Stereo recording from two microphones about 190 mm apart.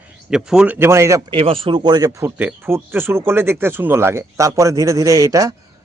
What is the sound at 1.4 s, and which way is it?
Speech, 30° right (ahead or behind).